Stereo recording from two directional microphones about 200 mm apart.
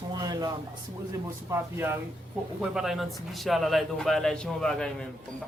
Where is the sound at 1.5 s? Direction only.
10° right (ahead or behind).